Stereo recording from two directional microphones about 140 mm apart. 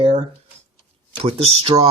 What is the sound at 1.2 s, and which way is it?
Speech, 45° right (ahead or behind).